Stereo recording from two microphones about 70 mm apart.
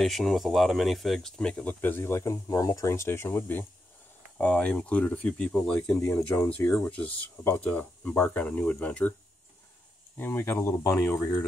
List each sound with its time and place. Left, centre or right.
0.0 s speech: centre
1.4 s speech: centre
4.4 s speech: centre
5.9 s speech: left
6.5 s speech: left
10.1 s speech: left